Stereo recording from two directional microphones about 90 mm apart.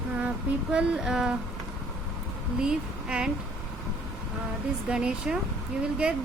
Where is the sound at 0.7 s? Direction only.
10° right (ahead or behind).